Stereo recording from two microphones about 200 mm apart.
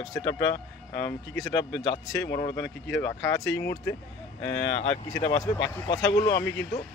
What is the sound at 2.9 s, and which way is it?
Speech, 15° left (ahead or behind).